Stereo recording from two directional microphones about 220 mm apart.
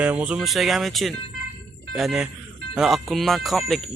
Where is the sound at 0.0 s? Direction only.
5° right (ahead or behind).